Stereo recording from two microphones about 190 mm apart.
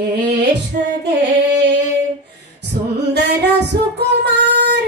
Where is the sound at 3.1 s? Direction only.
65° right (ahead or behind).